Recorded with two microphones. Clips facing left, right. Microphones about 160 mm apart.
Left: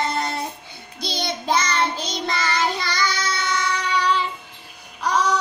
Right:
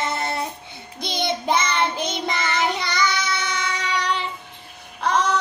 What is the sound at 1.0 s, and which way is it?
Child singing, 20° right (ahead or behind).